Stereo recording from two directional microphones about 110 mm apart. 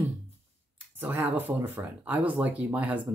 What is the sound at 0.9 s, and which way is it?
Speech, 20° right (ahead or behind).